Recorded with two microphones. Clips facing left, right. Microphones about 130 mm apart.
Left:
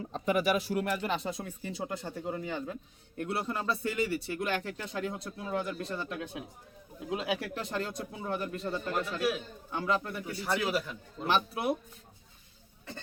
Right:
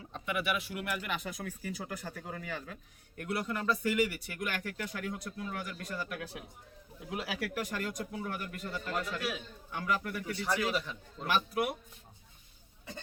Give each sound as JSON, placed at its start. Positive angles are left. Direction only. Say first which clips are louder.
{"t": 0.0, "sound": "speech", "louder": "left 7 dB", "side_deg": 35}
{"t": 10.4, "sound": "a man's voice", "louder": "left 2 dB", "side_deg": 0}
{"t": 11.3, "sound": "speech", "louder": "left 2 dB", "side_deg": 25}